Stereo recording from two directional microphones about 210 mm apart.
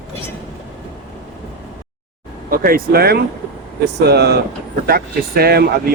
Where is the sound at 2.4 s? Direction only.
45° right (ahead or behind).